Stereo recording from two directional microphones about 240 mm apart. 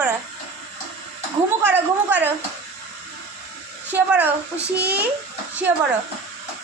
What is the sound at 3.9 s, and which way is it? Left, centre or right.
Speech, centre.